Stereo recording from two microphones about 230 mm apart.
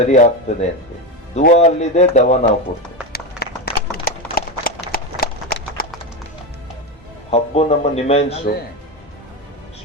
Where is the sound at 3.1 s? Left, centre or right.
Left.